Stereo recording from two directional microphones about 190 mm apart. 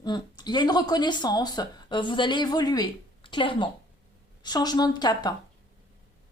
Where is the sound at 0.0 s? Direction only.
20° left (ahead or behind).